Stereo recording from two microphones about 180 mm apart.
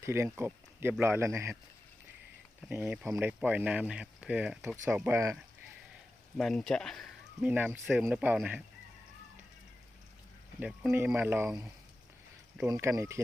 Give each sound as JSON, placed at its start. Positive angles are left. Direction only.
{"t": 0.0, "sound": "speech", "side_deg": -15}
{"t": 2.6, "sound": "speech", "side_deg": -10}
{"t": 6.3, "sound": "speech", "side_deg": 0}
{"t": 10.6, "sound": "speech", "side_deg": -5}
{"t": 12.6, "sound": "speech", "side_deg": -15}